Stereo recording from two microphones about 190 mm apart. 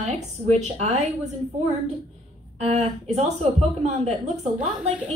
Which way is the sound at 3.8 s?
35° right (ahead or behind).